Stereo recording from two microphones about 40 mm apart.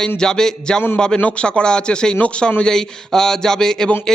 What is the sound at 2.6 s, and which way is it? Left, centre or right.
A man's voice, centre.